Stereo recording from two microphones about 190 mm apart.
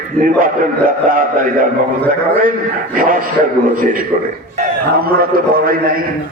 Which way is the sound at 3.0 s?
45° right (ahead or behind).